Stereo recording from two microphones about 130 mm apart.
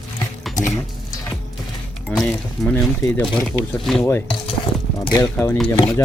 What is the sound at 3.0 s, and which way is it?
Mechanisms, 15° left (ahead or behind).